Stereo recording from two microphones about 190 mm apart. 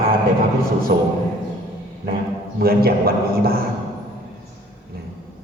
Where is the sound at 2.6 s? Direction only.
55° right (ahead or behind).